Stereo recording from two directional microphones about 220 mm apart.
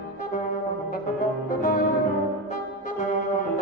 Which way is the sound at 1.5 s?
40° left (ahead or behind).